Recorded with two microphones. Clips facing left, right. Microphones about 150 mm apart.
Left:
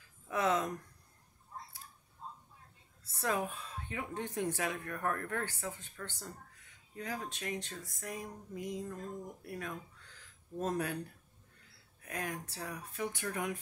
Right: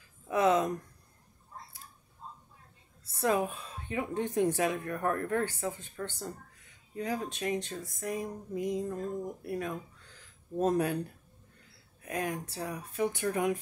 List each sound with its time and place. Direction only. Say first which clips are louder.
0.3 s speech: right 6 dB; 20° right (ahead or behind)
3.2 s speech: right 6 dB; 20° right (ahead or behind)
12.0 s speech: right 6 dB; 20° right (ahead or behind)